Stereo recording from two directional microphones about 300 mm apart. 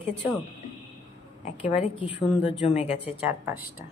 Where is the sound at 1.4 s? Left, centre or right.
Left.